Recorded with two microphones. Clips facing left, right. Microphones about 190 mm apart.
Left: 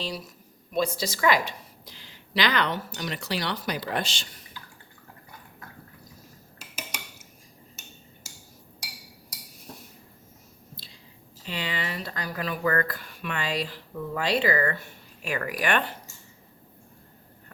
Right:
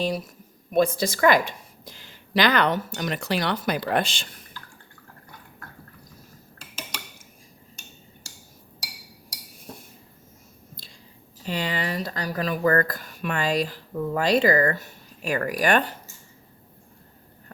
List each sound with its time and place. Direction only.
0.0 s a woman's voice: 50° right (ahead or behind)
11.4 s speech: 45° right (ahead or behind)